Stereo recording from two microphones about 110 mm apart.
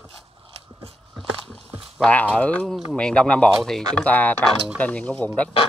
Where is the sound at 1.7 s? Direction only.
5° right (ahead or behind).